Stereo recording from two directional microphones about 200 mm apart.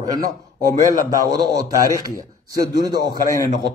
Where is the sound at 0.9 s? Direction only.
20° right (ahead or behind).